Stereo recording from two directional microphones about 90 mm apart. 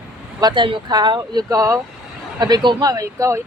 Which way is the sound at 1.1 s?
40° right (ahead or behind).